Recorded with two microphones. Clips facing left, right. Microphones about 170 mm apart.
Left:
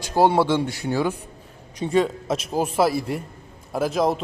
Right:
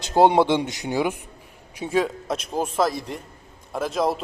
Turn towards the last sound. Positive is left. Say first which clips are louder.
# left 2 dB
turn(degrees=0)  # may be behind; listen again after turning